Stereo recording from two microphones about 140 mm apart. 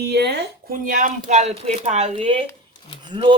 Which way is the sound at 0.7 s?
75° right (ahead or behind).